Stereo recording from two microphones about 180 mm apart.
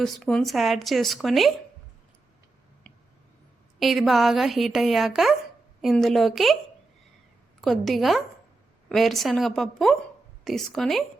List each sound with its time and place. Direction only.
0.0 s a woman's voice: centre (ahead or behind)
3.8 s a woman's voice: centre (ahead or behind)
7.6 s a woman's voice: centre (ahead or behind)